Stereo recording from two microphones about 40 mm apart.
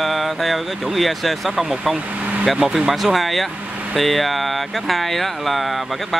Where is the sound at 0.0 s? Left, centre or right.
Centre.